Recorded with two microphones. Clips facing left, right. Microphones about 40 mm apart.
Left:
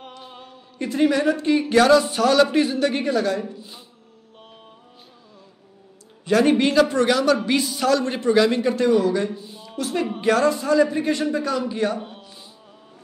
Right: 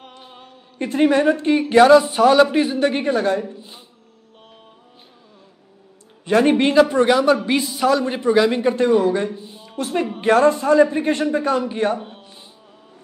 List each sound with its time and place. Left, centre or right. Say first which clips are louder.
0.3 s a sound: left 1 dB; centre
0.7 s a man's voice: right 3 dB; right
6.2 s a man's voice: right 2 dB; right
7.6 s a man's voice: right 2 dB; centre
8.7 s a man's voice: right 2 dB; right
9.3 s a sound: even; centre
9.8 s a man's voice: right 2 dB; right